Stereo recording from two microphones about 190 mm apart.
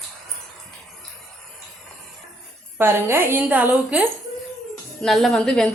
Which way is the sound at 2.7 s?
15° right (ahead or behind).